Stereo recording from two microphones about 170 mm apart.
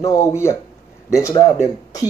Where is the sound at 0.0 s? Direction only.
20° left (ahead or behind).